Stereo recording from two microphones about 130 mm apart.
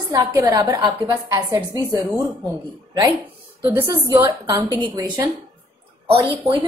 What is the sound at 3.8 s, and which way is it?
A woman's voice, 25° right (ahead or behind).